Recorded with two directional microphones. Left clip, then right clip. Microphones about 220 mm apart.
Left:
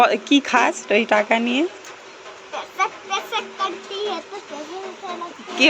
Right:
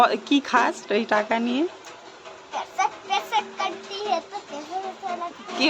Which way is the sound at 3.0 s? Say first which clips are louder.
Right 1 dB; 10° right (ahead or behind).